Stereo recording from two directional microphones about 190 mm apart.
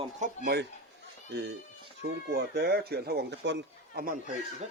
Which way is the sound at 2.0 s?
65° right (ahead or behind).